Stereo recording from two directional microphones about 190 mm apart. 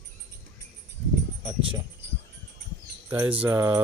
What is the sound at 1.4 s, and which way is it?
Speech, 25° right (ahead or behind).